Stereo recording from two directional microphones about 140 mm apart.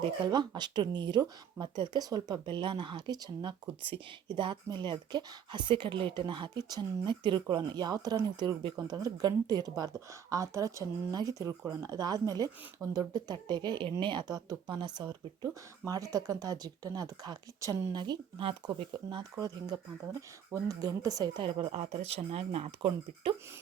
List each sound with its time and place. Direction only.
0.0 s speech: 30° right (ahead or behind)
18.0 s speech: 35° right (ahead or behind)
21.7 s speech: 50° right (ahead or behind)